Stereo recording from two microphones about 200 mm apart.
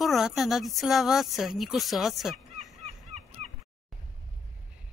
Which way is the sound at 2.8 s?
35° right (ahead or behind).